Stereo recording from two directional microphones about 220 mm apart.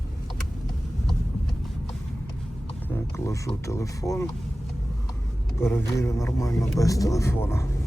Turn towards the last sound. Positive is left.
turn(degrees=10)  # may be behind; listen again after turning